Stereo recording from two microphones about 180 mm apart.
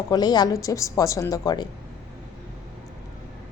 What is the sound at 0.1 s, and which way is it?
A woman's voice, 20° left (ahead or behind).